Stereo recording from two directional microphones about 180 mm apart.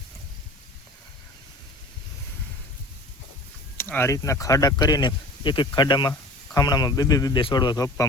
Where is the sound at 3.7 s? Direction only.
10° left (ahead or behind).